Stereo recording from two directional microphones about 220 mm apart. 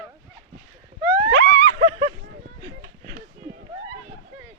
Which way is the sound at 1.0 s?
15° right (ahead or behind).